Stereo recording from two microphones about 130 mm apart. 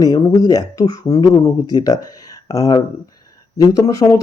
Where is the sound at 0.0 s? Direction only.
25° left (ahead or behind).